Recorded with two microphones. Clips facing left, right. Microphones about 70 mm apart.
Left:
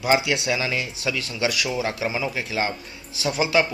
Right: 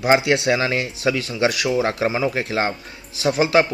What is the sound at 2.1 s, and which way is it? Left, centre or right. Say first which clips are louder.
Speech: right 5 dB; right.